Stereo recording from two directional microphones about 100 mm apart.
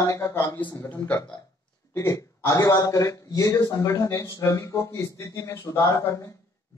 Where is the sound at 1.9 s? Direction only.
30° left (ahead or behind).